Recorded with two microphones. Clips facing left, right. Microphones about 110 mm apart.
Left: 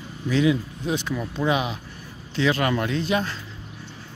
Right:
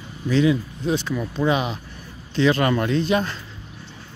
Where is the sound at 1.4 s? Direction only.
5° left (ahead or behind).